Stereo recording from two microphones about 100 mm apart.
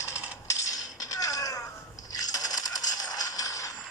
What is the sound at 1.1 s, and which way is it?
Crow, 35° left (ahead or behind).